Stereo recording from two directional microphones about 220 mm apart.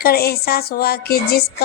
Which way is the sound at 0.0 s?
45° left (ahead or behind).